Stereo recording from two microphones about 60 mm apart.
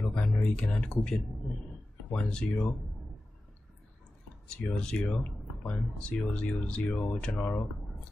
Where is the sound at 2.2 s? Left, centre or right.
Centre.